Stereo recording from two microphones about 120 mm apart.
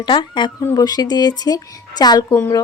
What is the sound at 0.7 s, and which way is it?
Speech, 35° left (ahead or behind).